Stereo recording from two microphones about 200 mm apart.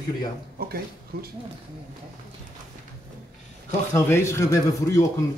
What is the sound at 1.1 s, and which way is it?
Speech, 50° right (ahead or behind).